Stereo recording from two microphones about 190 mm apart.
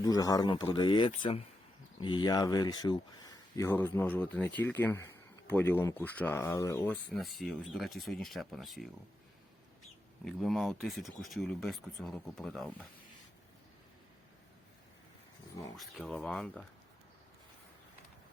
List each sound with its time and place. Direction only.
0.0 s speech: 20° left (ahead or behind); by 8.9 s centre (ahead or behind)
10.2 s speech: centre (ahead or behind)
15.7 s speech: centre (ahead or behind)